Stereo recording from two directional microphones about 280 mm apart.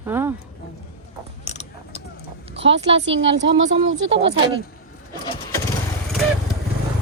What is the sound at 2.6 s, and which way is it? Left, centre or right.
A woman's voice, right.